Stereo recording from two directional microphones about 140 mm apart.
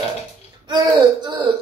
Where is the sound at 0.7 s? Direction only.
30° right (ahead or behind).